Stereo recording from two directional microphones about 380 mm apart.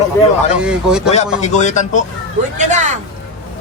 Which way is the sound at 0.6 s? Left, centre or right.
Centre.